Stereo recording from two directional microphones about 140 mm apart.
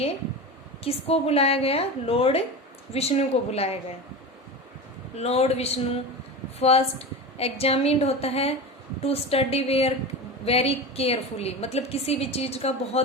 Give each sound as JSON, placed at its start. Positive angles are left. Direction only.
{"t": 0.9, "sound": "a woman's voice", "side_deg": 45}
{"t": 5.1, "sound": "a woman's voice", "side_deg": 50}